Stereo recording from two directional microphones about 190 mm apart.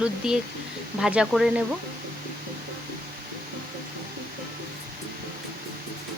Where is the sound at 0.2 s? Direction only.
5° right (ahead or behind).